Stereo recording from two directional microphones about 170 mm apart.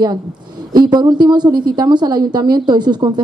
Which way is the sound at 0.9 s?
25° right (ahead or behind).